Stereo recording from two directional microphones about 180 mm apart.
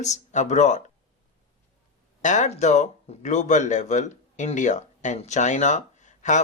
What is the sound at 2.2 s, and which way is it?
Speech, 40° left (ahead or behind).